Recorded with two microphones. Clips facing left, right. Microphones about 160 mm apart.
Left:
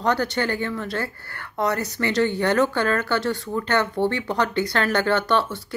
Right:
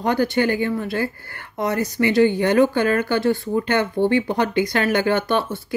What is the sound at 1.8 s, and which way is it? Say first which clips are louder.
Speech: right 6 dB; 15° right (ahead or behind).